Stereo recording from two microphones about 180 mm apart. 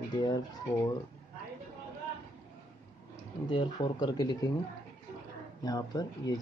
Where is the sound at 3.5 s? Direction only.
25° left (ahead or behind).